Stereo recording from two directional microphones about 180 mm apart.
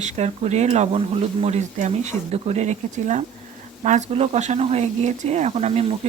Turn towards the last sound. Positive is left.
turn(degrees=-35)  # may be behind; listen again after turning